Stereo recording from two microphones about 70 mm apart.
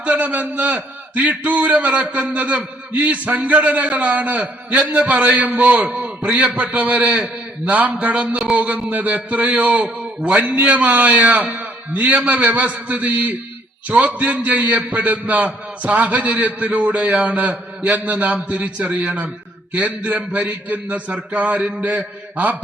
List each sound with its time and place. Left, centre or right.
0.0 s a man's voice: centre